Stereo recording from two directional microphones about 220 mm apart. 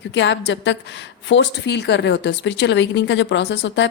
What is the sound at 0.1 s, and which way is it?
A woman's voice, 55° left (ahead or behind).